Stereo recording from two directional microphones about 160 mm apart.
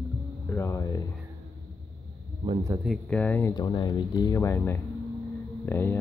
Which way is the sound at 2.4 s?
35° right (ahead or behind).